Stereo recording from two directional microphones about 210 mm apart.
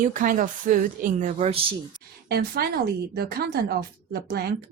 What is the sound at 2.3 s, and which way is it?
Speech, 45° right (ahead or behind).